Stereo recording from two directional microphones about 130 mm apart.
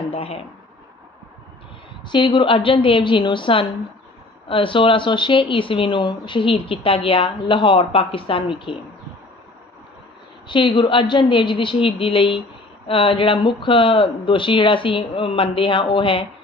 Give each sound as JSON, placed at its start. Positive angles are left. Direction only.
{"t": 0.1, "sound": "speech", "side_deg": 50}
{"t": 2.0, "sound": "speech", "side_deg": 35}
{"t": 10.5, "sound": "speech", "side_deg": 40}